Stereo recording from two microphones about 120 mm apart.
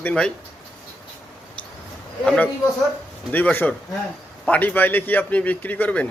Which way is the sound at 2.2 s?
5° left (ahead or behind).